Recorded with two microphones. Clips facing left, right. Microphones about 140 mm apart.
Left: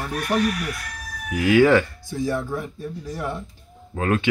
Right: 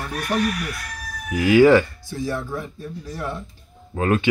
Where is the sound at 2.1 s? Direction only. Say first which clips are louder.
Left 2 dB; 20° left (ahead or behind).